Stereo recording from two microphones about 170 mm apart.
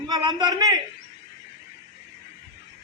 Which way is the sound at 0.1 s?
25° right (ahead or behind).